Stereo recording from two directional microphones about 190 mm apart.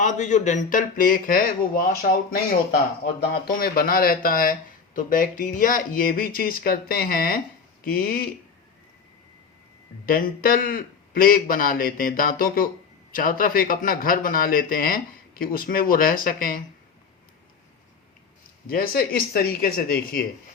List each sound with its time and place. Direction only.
0.0 s a man's voice: 40° left (ahead or behind)
10.1 s a man's voice: 50° left (ahead or behind)
18.7 s a man's voice: 50° left (ahead or behind)